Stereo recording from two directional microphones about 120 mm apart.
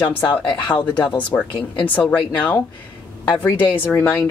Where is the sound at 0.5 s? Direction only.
40° left (ahead or behind).